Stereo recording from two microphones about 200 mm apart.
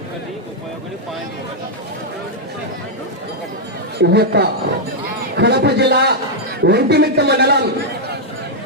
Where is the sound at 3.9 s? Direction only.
55° right (ahead or behind).